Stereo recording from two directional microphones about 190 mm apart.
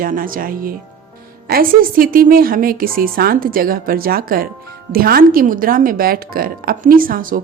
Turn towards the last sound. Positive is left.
turn(degrees=-45)  # may be behind; listen again after turning